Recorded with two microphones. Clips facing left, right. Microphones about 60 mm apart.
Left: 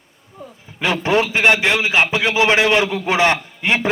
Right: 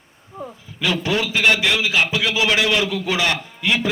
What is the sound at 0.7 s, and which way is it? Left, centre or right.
A man's voice, left.